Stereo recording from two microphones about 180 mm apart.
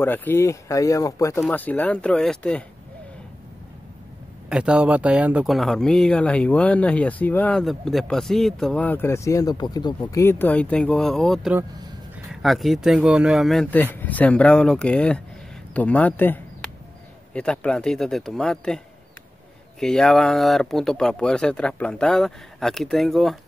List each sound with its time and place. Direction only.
0.0 s speech: 10° left (ahead or behind)
4.5 s speech: 5° right (ahead or behind)
19.8 s speech: 5° left (ahead or behind)